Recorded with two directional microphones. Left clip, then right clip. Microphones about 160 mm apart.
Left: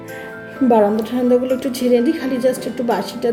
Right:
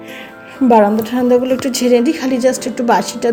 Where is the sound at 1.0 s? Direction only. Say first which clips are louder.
Right 3 dB; 20° right (ahead or behind).